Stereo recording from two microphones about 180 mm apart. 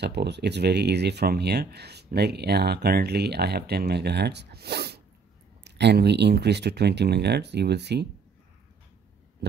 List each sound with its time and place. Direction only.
0.0 s speech: 70° right (ahead or behind)